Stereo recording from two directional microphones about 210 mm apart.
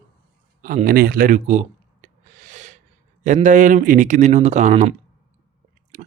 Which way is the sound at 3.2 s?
35° right (ahead or behind).